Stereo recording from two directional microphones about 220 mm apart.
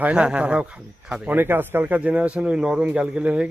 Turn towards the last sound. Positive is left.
turn(degrees=-5)  # may be behind; listen again after turning